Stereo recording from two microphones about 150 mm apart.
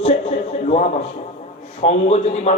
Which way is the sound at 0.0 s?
45° left (ahead or behind).